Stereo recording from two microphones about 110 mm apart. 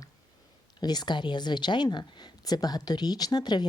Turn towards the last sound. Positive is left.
turn(degrees=40)  # may be behind; listen again after turning